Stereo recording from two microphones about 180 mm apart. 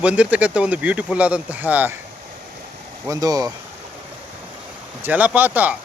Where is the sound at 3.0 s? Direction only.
20° right (ahead or behind).